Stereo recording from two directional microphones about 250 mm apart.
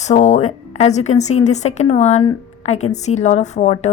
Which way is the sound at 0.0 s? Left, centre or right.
Left.